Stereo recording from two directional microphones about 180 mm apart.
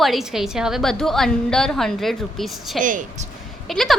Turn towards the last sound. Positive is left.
turn(degrees=0)  # may be behind; listen again after turning